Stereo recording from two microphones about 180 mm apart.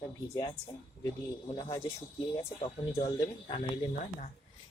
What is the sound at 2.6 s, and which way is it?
Speech, 25° left (ahead or behind).